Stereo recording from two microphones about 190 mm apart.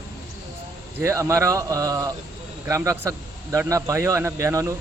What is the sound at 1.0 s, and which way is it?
A man's voice, 15° right (ahead or behind).